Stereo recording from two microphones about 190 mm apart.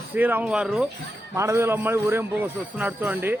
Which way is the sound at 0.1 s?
10° right (ahead or behind).